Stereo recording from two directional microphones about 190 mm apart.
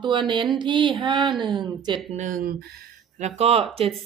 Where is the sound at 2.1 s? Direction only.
45° right (ahead or behind).